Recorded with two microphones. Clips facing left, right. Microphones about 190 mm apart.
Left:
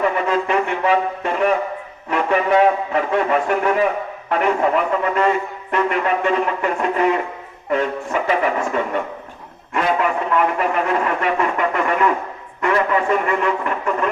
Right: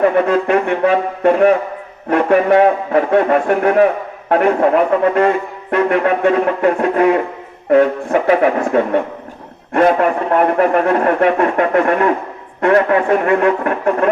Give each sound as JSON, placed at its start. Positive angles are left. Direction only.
{"t": 0.0, "sound": "a man's voice", "side_deg": -55}